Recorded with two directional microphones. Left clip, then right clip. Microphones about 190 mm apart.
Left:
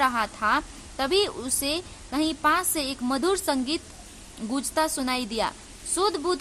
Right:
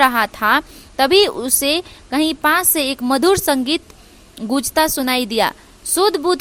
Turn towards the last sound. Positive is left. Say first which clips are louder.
# right 9 dB
turn(degrees=-30)  # may be behind; listen again after turning